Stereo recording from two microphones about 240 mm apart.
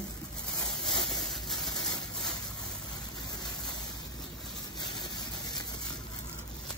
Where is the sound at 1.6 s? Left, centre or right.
Centre.